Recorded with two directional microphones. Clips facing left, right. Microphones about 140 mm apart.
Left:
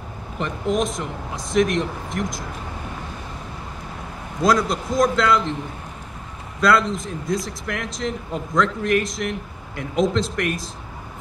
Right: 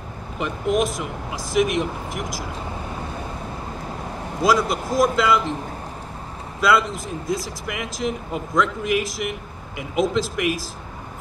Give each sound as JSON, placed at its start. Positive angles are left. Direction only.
{"t": 0.4, "sound": "speech", "side_deg": -5}
{"t": 4.4, "sound": "speech", "side_deg": -5}
{"t": 6.6, "sound": "speech", "side_deg": -5}